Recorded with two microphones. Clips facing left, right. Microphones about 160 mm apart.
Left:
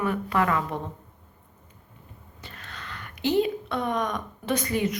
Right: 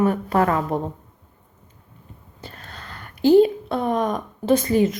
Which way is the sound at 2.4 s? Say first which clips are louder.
Right 4 dB; 35° right (ahead or behind).